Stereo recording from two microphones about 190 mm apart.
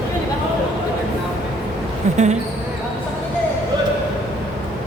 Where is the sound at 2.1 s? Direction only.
35° right (ahead or behind).